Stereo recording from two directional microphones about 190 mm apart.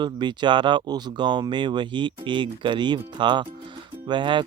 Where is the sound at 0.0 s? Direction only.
25° right (ahead or behind).